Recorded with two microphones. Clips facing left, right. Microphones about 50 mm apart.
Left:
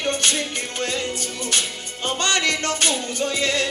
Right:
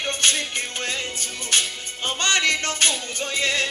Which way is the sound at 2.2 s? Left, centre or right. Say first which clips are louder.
Right 1 dB; right.